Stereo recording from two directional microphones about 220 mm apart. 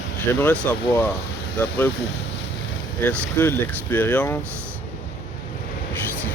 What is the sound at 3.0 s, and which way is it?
Speech, 10° left (ahead or behind).